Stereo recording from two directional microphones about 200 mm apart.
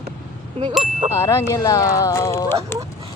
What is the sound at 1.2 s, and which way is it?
Speech, 15° left (ahead or behind).